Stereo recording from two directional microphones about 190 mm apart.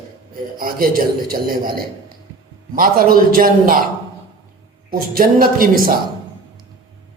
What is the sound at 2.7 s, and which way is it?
A man's voice, 50° right (ahead or behind).